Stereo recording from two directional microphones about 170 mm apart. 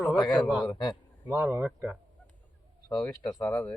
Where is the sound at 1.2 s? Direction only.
10° right (ahead or behind).